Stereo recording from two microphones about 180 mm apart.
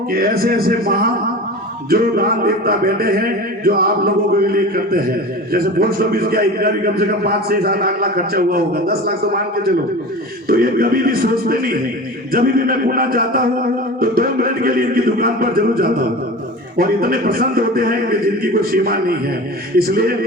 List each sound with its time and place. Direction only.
0.1 s a man's voice: 55° right (ahead or behind)
10.5 s a man's voice: 55° right (ahead or behind)